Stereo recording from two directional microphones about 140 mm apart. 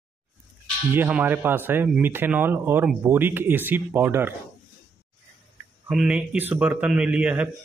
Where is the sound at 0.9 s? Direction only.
15° right (ahead or behind).